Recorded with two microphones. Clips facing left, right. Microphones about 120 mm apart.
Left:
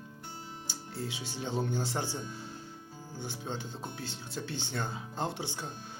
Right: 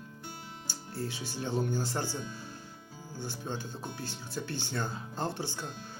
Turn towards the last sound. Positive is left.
turn(degrees=20)  # may be behind; listen again after turning